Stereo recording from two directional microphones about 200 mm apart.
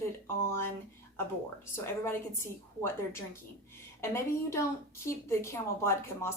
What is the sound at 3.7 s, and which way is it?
A woman's voice, 15° left (ahead or behind).